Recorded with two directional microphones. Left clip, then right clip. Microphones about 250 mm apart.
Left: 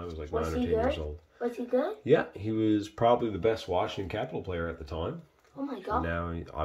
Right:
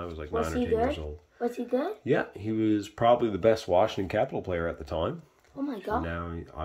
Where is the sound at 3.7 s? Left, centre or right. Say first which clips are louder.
Right 6 dB; centre.